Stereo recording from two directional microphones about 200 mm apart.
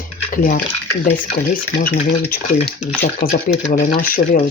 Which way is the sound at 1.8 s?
45° left (ahead or behind).